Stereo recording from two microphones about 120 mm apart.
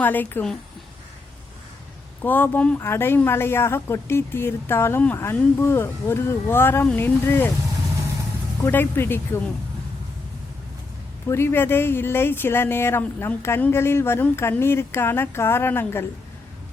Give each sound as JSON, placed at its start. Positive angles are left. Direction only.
{"t": 0.0, "sound": "speech", "side_deg": 15}
{"t": 2.2, "sound": "speech", "side_deg": 15}
{"t": 8.6, "sound": "speech", "side_deg": 15}
{"t": 11.3, "sound": "speech", "side_deg": 20}